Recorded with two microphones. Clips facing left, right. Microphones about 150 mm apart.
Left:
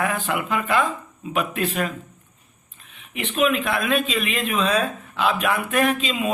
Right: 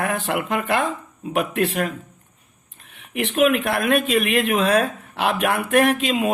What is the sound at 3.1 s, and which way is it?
Speech, 70° right (ahead or behind).